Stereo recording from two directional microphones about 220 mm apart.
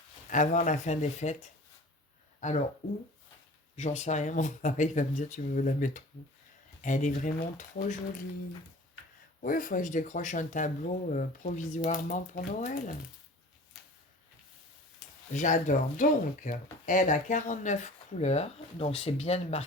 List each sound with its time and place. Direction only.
0.3 s speech: 35° left (ahead or behind)
3.8 s speech: 30° left (ahead or behind)
9.4 s speech: 40° left (ahead or behind)
15.3 s speech: 35° left (ahead or behind)